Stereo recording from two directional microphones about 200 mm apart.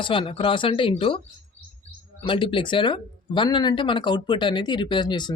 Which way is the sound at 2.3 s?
25° left (ahead or behind).